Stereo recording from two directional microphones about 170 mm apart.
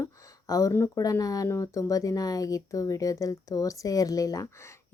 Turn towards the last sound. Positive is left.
turn(degrees=20)  # may be behind; listen again after turning